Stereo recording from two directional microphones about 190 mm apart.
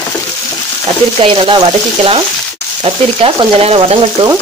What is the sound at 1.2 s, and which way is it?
Speech, 30° right (ahead or behind).